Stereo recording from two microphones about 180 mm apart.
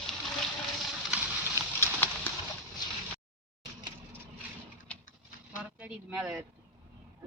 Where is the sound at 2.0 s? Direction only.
10° left (ahead or behind).